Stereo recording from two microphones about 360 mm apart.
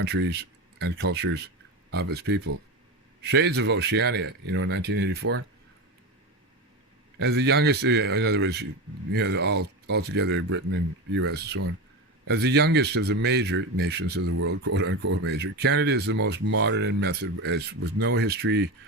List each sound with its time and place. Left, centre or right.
0.0 s speech: right
7.2 s speech: right